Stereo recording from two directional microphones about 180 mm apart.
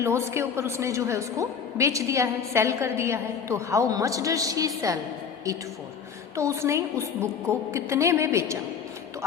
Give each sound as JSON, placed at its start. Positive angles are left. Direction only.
{"t": 0.0, "sound": "a woman's voice", "side_deg": -15}
{"t": 6.3, "sound": "a woman's voice", "side_deg": -15}